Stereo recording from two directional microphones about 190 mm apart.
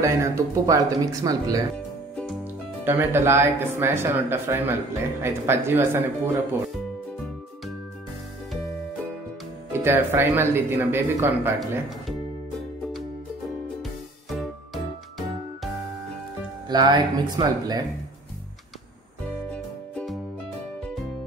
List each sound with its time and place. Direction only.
0.0 s speech: 15° right (ahead or behind)
2.8 s speech: 10° right (ahead or behind)
9.7 s speech: 10° right (ahead or behind)
14.3 s music: centre (ahead or behind)
16.6 s speech: 20° right (ahead or behind)
19.5 s music: 5° left (ahead or behind)